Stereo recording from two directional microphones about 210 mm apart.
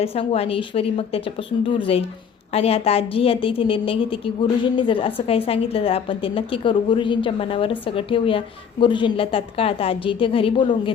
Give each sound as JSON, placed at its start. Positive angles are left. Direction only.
{"t": 0.0, "sound": "a woman's voice", "side_deg": 30}